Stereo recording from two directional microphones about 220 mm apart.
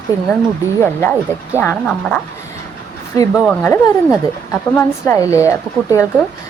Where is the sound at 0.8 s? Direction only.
10° left (ahead or behind).